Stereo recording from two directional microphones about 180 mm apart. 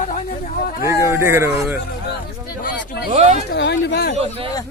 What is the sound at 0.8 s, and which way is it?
Speech, 15° right (ahead or behind).